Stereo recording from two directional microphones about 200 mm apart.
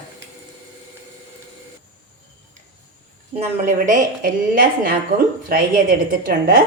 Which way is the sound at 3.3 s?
35° right (ahead or behind).